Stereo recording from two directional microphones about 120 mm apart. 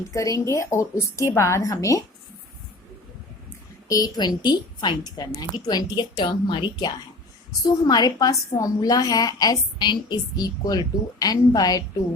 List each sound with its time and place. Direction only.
0.1 s a woman's voice: 25° left (ahead or behind)
3.8 s a woman's voice: 30° left (ahead or behind)